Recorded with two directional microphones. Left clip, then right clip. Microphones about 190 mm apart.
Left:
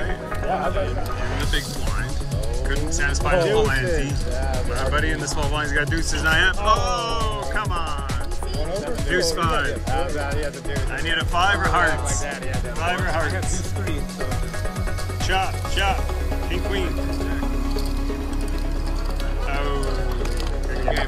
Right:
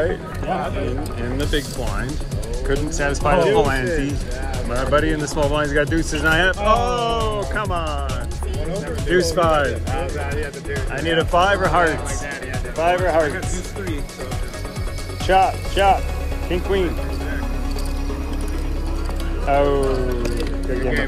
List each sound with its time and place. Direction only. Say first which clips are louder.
2.7 s speech: right 4 dB; 5° left (ahead or behind)
9.1 s speech: right 5 dB; 5° left (ahead or behind)
15.2 s speech: right 8 dB; 5° left (ahead or behind)
19.4 s speech: right 11 dB; 5° left (ahead or behind)